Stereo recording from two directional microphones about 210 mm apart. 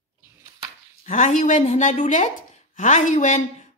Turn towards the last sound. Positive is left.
turn(degrees=35)  # may be behind; listen again after turning